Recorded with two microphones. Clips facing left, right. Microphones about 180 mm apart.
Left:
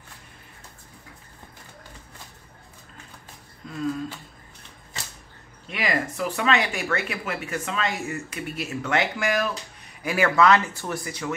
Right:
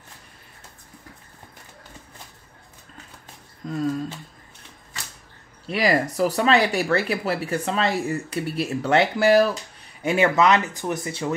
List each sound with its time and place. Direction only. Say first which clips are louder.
3.6 s speech: right 8 dB; 40° right (ahead or behind)
5.7 s speech: right 6 dB; 35° right (ahead or behind)